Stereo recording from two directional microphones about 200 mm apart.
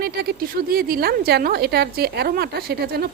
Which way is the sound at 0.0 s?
50° right (ahead or behind).